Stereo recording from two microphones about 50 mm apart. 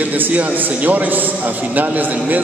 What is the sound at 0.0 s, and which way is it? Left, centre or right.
A man's voice, right.